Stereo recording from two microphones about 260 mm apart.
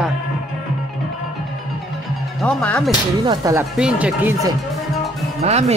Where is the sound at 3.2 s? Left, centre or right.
Centre.